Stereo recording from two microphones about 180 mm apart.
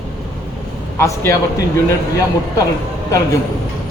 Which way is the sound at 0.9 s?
15° left (ahead or behind).